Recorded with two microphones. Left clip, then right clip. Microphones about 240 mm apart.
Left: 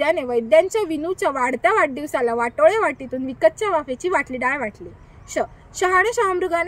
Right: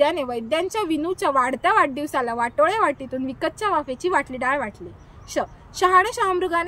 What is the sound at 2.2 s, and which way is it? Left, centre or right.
Speech, right.